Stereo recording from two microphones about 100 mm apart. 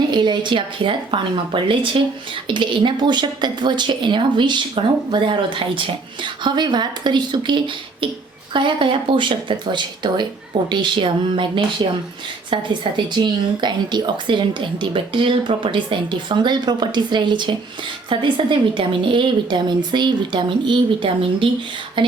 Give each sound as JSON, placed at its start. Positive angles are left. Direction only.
{"t": 0.1, "sound": "a woman's voice", "side_deg": -50}